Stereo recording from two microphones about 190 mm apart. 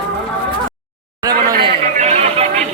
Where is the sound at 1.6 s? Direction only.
35° right (ahead or behind).